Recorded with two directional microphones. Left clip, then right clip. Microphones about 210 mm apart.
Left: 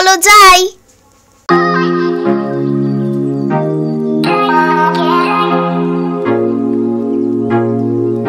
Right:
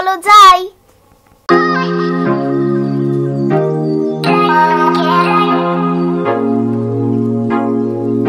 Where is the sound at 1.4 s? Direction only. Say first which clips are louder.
Left 1 dB; centre (ahead or behind).